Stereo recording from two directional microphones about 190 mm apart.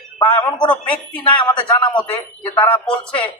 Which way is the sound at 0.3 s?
20° left (ahead or behind).